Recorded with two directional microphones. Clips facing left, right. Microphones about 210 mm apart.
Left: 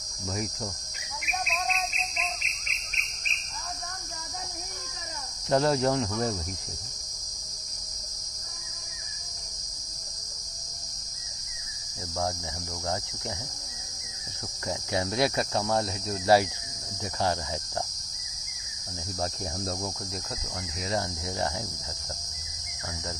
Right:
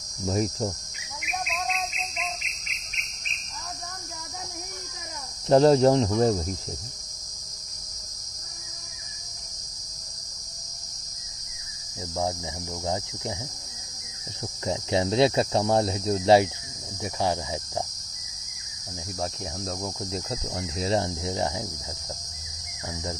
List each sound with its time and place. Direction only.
0.3 s cricket: 30° right (ahead or behind)
5.5 s speech: 30° right (ahead or behind)
14.7 s speech: 25° right (ahead or behind)
20.1 s speech: 25° right (ahead or behind)